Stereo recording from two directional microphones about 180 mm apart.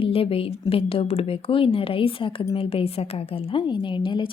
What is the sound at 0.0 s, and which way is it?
Speech, 30° left (ahead or behind).